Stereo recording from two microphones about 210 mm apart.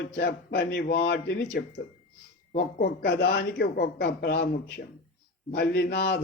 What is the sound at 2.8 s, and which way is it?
Speech, 50° left (ahead or behind).